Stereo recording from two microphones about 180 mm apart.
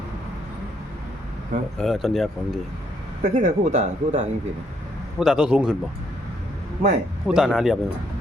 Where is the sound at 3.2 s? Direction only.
40° right (ahead or behind).